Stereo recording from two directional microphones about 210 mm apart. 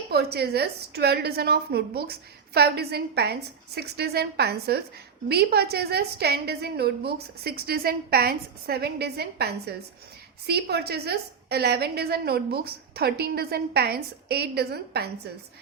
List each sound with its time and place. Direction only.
0.1 s a woman's voice: 50° right (ahead or behind)